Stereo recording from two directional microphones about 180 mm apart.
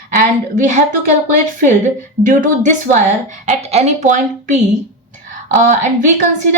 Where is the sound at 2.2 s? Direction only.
45° right (ahead or behind).